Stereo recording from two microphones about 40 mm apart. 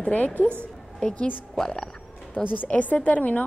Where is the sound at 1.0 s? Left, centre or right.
Left.